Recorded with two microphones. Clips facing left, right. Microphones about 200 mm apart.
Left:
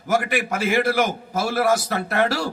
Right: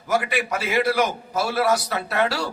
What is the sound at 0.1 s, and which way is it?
Speech, 50° left (ahead or behind).